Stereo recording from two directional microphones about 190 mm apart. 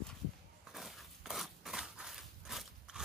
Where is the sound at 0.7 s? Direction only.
Centre (ahead or behind).